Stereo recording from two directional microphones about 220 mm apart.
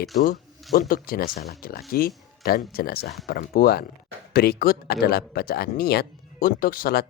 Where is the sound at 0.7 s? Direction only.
40° left (ahead or behind).